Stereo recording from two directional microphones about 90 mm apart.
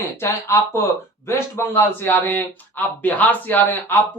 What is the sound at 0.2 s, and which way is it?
Speech, 30° left (ahead or behind).